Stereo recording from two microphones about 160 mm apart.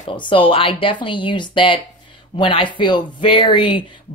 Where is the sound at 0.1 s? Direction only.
30° left (ahead or behind).